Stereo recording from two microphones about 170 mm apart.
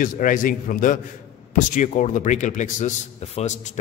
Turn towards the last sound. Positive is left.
turn(degrees=40)  # may be behind; listen again after turning